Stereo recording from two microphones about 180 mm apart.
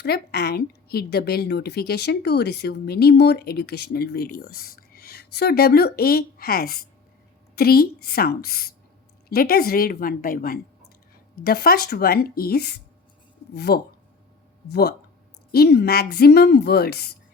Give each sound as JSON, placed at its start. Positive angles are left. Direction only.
{"t": 0.0, "sound": "a woman's voice", "side_deg": 60}